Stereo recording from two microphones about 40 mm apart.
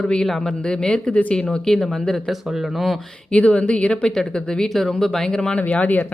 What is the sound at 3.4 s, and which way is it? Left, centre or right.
Speech, left.